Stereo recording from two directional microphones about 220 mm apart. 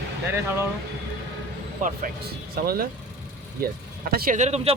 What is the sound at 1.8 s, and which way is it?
Speech, 40° right (ahead or behind).